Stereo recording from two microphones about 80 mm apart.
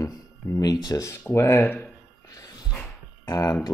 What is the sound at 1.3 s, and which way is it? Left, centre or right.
Speech, left.